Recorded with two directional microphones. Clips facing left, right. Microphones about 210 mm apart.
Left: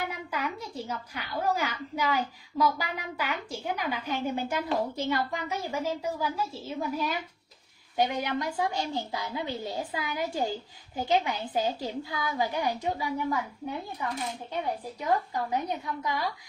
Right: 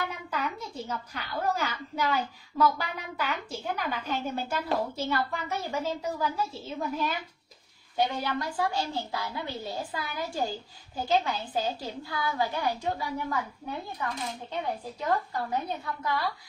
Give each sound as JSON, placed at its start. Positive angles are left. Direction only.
{"t": 0.3, "sound": "a woman's voice", "side_deg": 10}
{"t": 15.0, "sound": "a woman's voice", "side_deg": 15}